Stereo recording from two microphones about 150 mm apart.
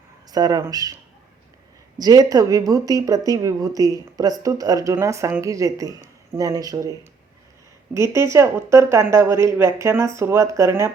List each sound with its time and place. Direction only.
0.3 s speech: 25° right (ahead or behind)
2.0 s speech: 25° right (ahead or behind)
7.9 s speech: 20° right (ahead or behind)